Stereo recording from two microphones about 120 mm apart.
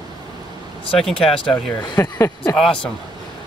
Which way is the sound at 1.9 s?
25° left (ahead or behind).